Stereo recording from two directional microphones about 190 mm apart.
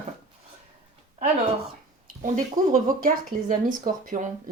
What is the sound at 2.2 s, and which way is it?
Speech, 45° right (ahead or behind).